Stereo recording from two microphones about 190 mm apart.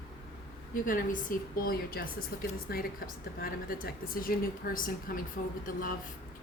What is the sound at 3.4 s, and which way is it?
A woman's voice, 50° left (ahead or behind).